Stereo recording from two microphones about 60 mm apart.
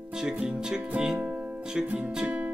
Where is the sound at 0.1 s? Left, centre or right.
Centre.